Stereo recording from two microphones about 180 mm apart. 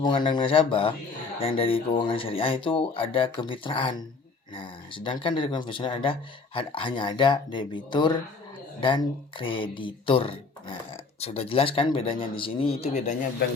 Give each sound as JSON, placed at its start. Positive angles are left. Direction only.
{"t": 0.0, "sound": "speech", "side_deg": 25}